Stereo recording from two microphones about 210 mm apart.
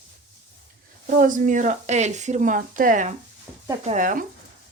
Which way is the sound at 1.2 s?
40° right (ahead or behind).